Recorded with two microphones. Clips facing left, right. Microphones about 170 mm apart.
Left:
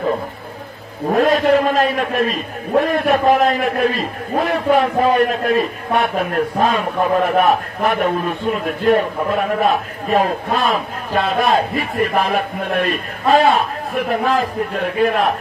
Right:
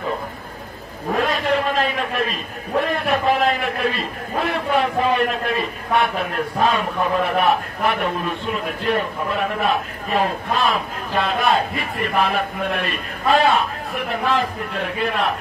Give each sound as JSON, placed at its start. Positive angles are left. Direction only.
{"t": 1.1, "sound": "a man's voice", "side_deg": 45}